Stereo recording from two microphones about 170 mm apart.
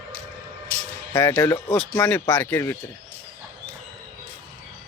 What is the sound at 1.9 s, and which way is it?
Speech, 10° left (ahead or behind).